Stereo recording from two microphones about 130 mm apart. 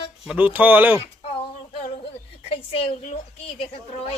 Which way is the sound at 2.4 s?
45° left (ahead or behind).